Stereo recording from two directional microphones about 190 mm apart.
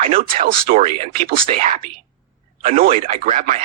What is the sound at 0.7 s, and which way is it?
Speech, 35° right (ahead or behind).